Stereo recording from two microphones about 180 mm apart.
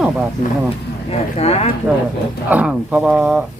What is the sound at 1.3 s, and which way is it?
Speech, 35° left (ahead or behind).